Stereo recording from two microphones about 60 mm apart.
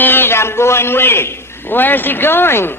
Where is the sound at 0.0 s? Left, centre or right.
Left.